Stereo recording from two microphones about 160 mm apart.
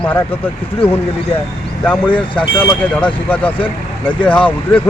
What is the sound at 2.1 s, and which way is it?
Speech, 30° left (ahead or behind).